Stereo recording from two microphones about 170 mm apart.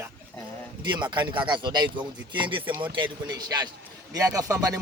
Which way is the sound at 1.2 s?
30° right (ahead or behind).